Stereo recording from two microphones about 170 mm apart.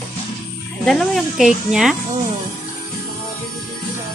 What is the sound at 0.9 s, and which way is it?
Speech, centre (ahead or behind).